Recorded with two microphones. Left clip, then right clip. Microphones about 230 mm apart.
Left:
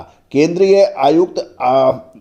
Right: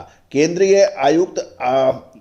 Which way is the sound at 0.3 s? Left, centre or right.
Left.